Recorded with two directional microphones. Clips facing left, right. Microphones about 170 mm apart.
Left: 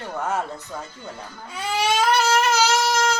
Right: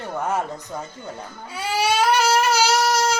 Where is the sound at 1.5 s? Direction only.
5° right (ahead or behind).